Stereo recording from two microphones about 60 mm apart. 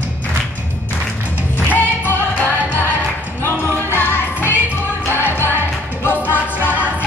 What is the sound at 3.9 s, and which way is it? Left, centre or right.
Music, left.